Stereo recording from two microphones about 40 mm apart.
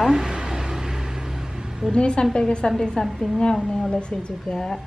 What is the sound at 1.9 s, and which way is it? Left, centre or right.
A woman's voice, left.